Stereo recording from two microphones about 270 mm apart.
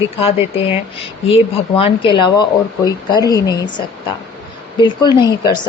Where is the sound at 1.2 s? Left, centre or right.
Left.